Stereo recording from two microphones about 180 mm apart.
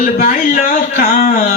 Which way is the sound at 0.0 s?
40° left (ahead or behind).